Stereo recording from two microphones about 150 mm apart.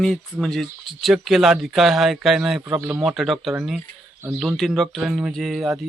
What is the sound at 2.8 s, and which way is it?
Speech, 15° right (ahead or behind).